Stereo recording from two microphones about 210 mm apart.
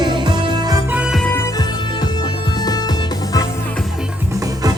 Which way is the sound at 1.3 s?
15° left (ahead or behind).